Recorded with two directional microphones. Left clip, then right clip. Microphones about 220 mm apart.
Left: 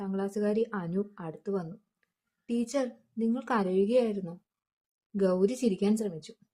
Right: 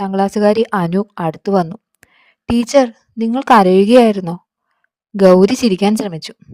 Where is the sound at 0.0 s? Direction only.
45° right (ahead or behind).